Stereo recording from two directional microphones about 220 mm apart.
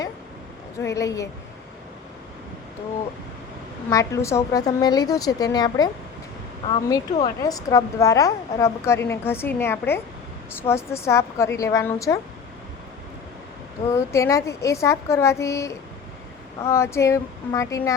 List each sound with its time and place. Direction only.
0.8 s a woman's voice: 15° left (ahead or behind)
3.8 s a woman's voice: 15° left (ahead or behind)
13.9 s a woman's voice: 15° left (ahead or behind)